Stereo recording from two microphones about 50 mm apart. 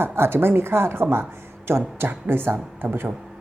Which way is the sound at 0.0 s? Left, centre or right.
Right.